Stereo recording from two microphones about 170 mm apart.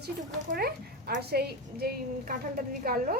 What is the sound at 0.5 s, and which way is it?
A woman's voice, 65° right (ahead or behind).